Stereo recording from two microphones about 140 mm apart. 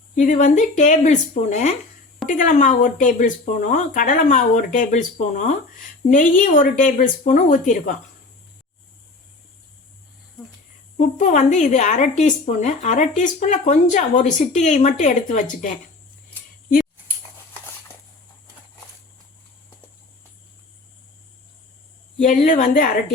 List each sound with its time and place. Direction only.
0.2 s speech: 60° left (ahead or behind)
10.9 s speech: 60° left (ahead or behind)
22.2 s speech: 60° left (ahead or behind); by 23.0 s 85° left